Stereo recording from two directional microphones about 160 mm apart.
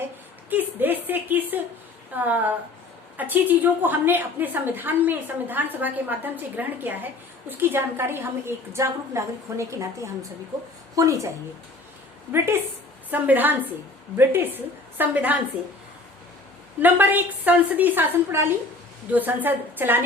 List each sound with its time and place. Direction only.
0.5 s a woman's voice: 10° right (ahead or behind)
13.1 s a woman's voice: 10° right (ahead or behind)
16.8 s a woman's voice: 10° right (ahead or behind)